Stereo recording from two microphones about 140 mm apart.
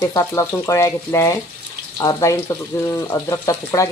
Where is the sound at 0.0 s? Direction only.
25° left (ahead or behind).